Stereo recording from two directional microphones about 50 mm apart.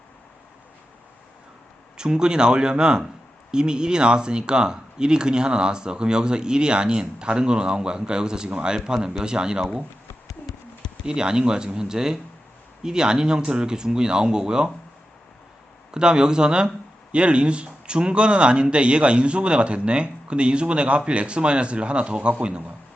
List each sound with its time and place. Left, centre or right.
2.0 s speech: centre
11.0 s speech: centre
15.9 s speech: centre